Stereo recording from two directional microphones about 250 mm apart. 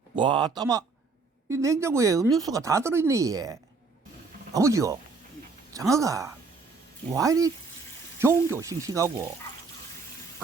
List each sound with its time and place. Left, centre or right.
0.2 s speech: centre